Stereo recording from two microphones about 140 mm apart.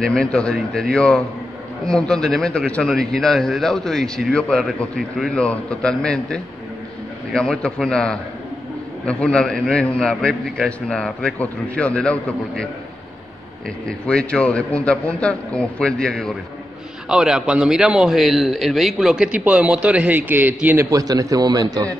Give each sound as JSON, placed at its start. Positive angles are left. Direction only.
{"t": 0.0, "sound": "a man's voice", "side_deg": 5}
{"t": 13.8, "sound": "a man's voice", "side_deg": 5}
{"t": 20.9, "sound": "a man's voice", "side_deg": -25}